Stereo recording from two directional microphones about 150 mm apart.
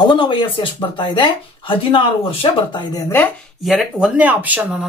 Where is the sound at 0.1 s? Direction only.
30° left (ahead or behind).